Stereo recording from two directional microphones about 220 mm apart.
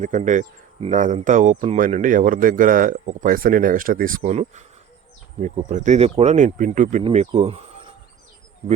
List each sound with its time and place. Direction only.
0.0 s speech: 35° right (ahead or behind)